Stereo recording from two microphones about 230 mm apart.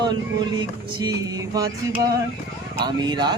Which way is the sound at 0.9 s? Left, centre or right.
Centre.